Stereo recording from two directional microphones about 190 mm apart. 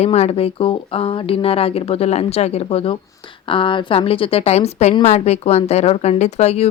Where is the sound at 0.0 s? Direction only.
35° left (ahead or behind).